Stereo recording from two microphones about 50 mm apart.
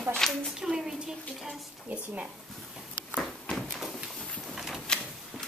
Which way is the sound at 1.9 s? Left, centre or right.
Right.